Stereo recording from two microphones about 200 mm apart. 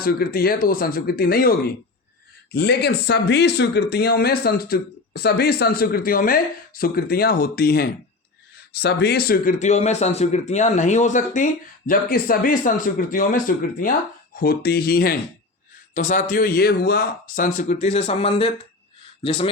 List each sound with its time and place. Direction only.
0.0 s speech: 45° left (ahead or behind); by 19.5 s 25° left (ahead or behind)